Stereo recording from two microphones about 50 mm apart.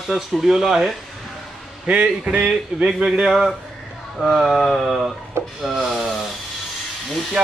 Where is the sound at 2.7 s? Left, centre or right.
Centre.